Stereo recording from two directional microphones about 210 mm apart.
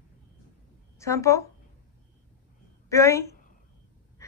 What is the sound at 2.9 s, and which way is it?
Speech, 15° left (ahead or behind).